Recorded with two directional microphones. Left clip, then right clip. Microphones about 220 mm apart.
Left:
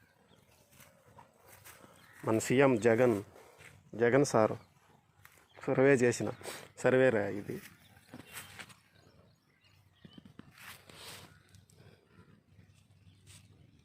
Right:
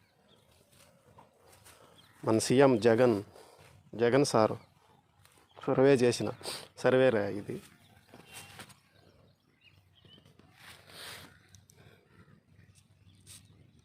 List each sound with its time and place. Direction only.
2.2 s speech: 20° right (ahead or behind)